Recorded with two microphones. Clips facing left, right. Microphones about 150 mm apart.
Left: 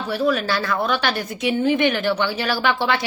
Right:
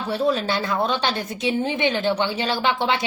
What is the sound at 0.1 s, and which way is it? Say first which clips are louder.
A woman's voice: left 1 dB; 25° right (ahead or behind).